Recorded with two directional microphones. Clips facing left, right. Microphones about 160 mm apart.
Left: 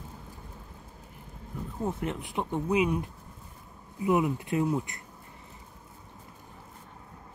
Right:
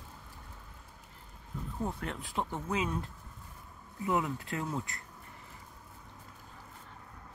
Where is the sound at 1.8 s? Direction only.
20° left (ahead or behind).